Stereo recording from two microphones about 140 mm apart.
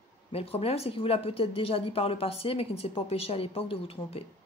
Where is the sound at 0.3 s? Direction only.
45° left (ahead or behind).